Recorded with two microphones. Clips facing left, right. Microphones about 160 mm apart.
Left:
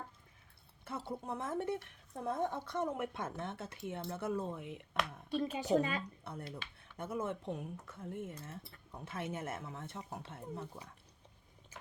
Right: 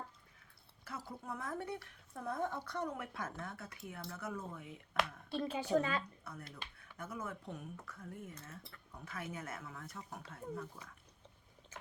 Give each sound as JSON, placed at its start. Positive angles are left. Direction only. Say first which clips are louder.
{"t": 0.9, "sound": "a woman's voice", "louder": "left 5 dB", "side_deg": 25}
{"t": 5.3, "sound": "a woman's voice", "louder": "left 3 dB", "side_deg": 15}
{"t": 6.5, "sound": "a woman's voice", "louder": "left 4 dB", "side_deg": 30}
{"t": 11.7, "sound": "biting", "louder": "right 2 dB", "side_deg": 10}